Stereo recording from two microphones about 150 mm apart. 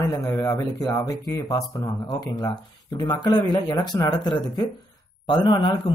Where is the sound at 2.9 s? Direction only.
30° left (ahead or behind).